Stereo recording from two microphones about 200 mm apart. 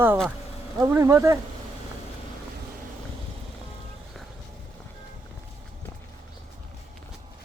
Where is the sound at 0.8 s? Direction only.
15° right (ahead or behind).